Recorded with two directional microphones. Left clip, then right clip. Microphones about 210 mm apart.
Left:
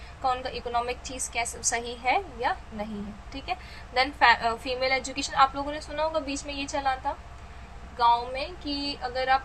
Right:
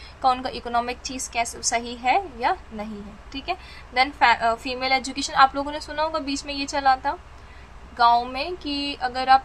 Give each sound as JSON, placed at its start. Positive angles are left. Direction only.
{"t": 0.2, "sound": "a woman's voice", "side_deg": -25}